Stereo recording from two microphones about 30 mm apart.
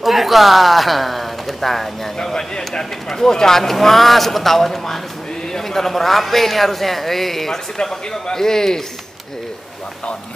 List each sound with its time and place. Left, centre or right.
0.0 s a woman's voice: centre
2.1 s a man's voice: left